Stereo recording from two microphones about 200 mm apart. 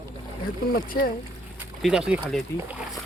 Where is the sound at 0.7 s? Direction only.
50° left (ahead or behind).